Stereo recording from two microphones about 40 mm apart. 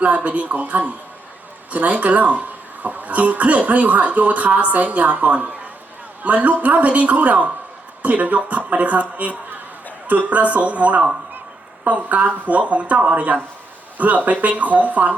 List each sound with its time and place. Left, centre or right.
0.0 s speech: right